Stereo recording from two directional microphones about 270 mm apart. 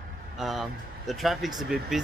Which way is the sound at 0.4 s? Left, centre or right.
Centre.